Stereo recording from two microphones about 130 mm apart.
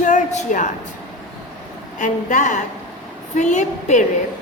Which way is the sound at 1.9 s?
80° left.